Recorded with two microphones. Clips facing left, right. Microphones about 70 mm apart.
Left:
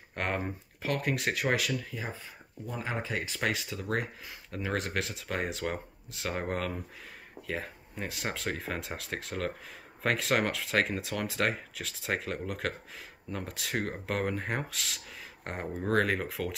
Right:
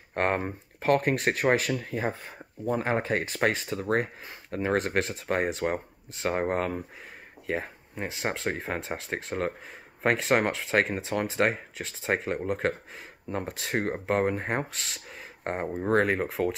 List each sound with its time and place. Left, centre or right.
0.1 s speech: right